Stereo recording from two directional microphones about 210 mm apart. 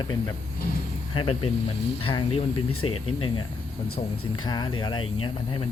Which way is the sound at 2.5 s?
90° left.